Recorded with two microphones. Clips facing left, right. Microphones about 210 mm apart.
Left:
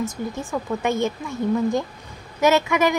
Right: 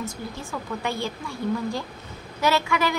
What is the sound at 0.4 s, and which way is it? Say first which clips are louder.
A woman's voice: left 6 dB; 20° left (ahead or behind).